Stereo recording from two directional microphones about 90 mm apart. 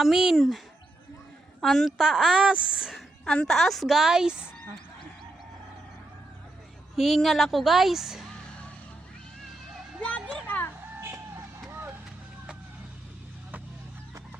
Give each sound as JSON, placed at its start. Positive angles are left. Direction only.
{"t": 0.0, "sound": "a woman's voice", "side_deg": -5}
{"t": 1.6, "sound": "a woman's voice", "side_deg": 0}
{"t": 3.2, "sound": "a woman's voice", "side_deg": 5}
{"t": 6.9, "sound": "a woman's voice", "side_deg": 0}
{"t": 10.0, "sound": "music", "side_deg": 10}
{"t": 10.4, "sound": "music", "side_deg": 20}
{"t": 11.7, "sound": "vehicle", "side_deg": -25}